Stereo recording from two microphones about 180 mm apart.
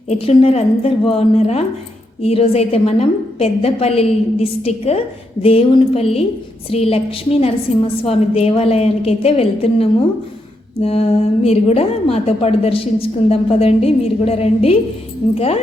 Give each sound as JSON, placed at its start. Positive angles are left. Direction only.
{"t": 0.1, "sound": "a woman's voice", "side_deg": 35}